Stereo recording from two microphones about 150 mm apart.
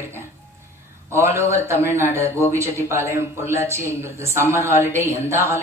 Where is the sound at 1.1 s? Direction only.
20° right (ahead or behind).